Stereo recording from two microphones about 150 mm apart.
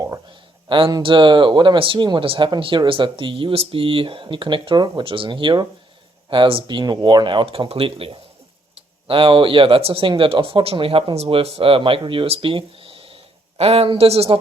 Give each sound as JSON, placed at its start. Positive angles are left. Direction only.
{"t": 0.7, "sound": "speech", "side_deg": -30}